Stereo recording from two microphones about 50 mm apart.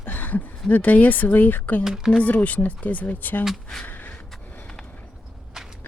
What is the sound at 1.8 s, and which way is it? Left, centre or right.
Speech, centre.